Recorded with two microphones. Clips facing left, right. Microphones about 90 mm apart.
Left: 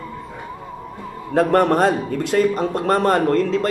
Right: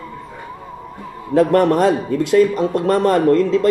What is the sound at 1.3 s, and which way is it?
A man's voice, 45° left (ahead or behind).